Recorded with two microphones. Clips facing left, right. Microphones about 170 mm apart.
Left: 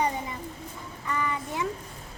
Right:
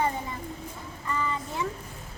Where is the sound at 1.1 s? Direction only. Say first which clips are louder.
Left 1 dB; 15° left (ahead or behind).